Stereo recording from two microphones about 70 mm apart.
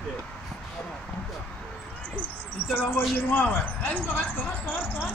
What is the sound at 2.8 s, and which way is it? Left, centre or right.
Speech, left.